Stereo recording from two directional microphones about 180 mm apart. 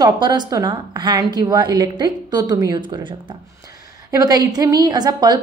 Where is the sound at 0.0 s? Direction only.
25° right (ahead or behind).